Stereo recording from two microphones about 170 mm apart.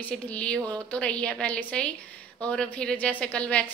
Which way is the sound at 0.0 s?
5° left (ahead or behind).